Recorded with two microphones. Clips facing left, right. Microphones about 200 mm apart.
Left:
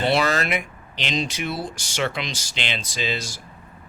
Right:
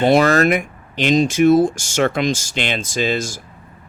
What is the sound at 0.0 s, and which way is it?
Speech, 45° right (ahead or behind).